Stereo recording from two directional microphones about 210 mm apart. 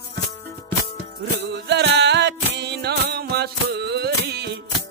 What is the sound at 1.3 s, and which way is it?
Music, 50° right (ahead or behind).